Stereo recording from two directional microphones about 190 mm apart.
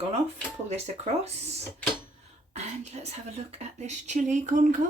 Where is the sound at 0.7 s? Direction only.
35° right (ahead or behind).